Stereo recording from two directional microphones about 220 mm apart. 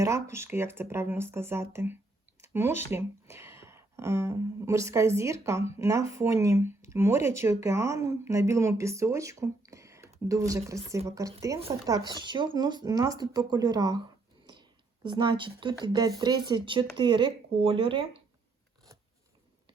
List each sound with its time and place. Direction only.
0.0 s speech: 10° right (ahead or behind)
15.0 s speech: 20° right (ahead or behind)